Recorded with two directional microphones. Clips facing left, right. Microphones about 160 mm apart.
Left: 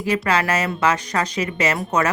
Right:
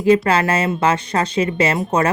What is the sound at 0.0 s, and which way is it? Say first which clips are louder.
Speech: right 6 dB; 30° right (ahead or behind).